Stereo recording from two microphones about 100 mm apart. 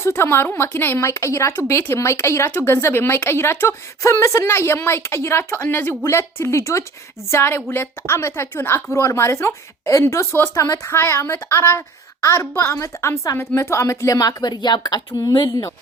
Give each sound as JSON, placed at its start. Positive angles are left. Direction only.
{"t": 0.0, "sound": "speech", "side_deg": 25}